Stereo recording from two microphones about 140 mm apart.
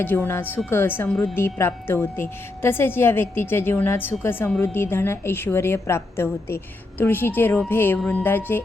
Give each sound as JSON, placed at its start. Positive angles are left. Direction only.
{"t": 0.0, "sound": "speech", "side_deg": 15}